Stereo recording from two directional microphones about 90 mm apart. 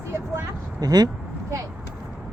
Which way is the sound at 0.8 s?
50° right (ahead or behind).